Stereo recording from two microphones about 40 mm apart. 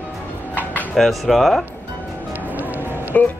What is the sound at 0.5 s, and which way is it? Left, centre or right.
Music, left.